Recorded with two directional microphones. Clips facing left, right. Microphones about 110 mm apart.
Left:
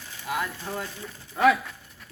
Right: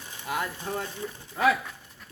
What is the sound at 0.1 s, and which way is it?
Speech, 20° right (ahead or behind).